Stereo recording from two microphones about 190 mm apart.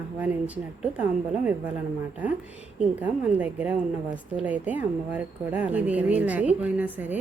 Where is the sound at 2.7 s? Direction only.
10° right (ahead or behind).